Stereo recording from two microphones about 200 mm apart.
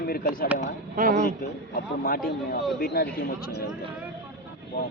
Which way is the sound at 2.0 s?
45° left (ahead or behind).